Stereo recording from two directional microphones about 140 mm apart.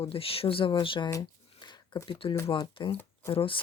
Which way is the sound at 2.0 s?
35° left (ahead or behind).